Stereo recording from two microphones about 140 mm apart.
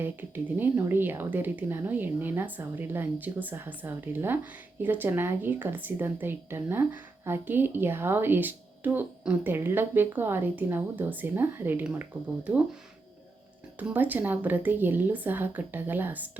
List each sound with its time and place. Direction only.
0.0 s speech: 15° right (ahead or behind)
13.7 s speech: 10° right (ahead or behind)